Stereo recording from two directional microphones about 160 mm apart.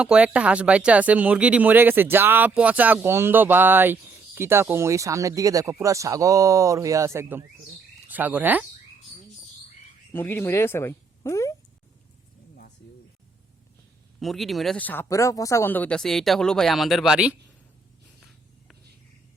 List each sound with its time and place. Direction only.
0.0 s speech: 5° right (ahead or behind)
10.1 s speech: 15° left (ahead or behind)
14.2 s speech: centre (ahead or behind)